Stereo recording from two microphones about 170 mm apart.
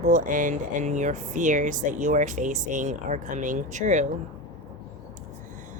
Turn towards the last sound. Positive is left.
turn(degrees=-45)  # may be behind; listen again after turning